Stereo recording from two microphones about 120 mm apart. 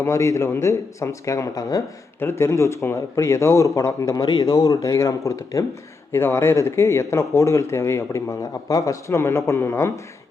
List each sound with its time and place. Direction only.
0.0 s speech: 25° left (ahead or behind)